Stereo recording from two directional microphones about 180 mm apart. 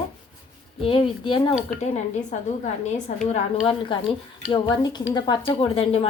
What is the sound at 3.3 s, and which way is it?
A woman's voice, 30° left (ahead or behind).